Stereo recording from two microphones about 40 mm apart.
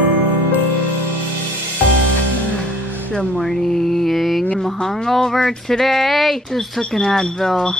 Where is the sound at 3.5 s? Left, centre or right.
Centre.